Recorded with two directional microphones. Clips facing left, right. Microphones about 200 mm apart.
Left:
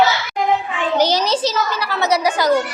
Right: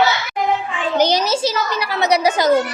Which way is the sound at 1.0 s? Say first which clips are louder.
Right 1 dB; 15° right (ahead or behind).